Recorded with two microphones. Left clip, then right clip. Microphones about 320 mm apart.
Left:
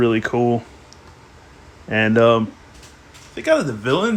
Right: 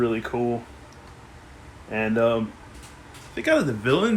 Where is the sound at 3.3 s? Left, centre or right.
Centre.